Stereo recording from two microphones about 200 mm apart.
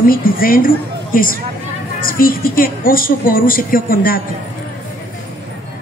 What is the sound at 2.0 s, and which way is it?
A woman's voice, 45° left (ahead or behind).